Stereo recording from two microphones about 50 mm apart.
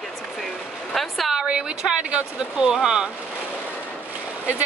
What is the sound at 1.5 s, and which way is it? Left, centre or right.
Speech, centre.